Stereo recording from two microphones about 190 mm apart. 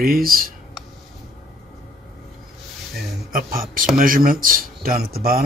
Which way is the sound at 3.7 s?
45° right (ahead or behind).